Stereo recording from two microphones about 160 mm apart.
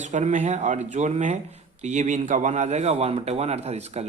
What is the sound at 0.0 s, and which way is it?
A man's voice, 45° right (ahead or behind).